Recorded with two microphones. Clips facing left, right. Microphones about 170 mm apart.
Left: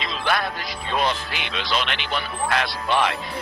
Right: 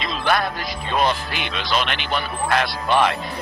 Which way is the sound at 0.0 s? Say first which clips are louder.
Right 3 dB; 45° right (ahead or behind).